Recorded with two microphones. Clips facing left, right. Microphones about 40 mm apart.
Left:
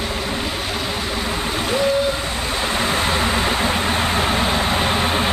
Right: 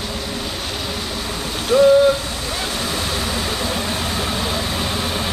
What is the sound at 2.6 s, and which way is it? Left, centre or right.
Vehicle, left.